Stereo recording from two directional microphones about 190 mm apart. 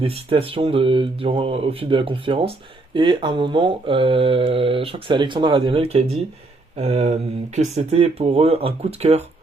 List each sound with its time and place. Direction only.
0.0 s speech: 30° right (ahead or behind)